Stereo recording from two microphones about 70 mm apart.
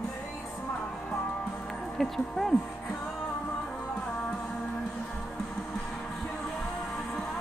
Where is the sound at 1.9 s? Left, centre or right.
Centre.